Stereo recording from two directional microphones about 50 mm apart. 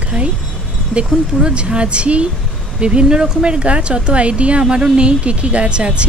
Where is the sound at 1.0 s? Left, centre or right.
Centre.